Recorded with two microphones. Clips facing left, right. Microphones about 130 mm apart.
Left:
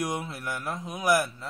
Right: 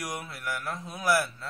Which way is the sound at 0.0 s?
25° left (ahead or behind).